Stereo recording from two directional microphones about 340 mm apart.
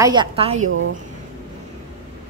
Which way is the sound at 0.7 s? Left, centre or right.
Right.